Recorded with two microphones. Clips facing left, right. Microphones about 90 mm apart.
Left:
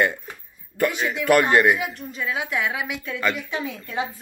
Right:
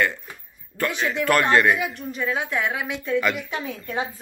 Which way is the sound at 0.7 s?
15° left (ahead or behind).